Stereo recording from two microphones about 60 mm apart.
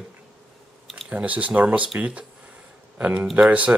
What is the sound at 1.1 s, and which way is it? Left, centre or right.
A man's voice, right.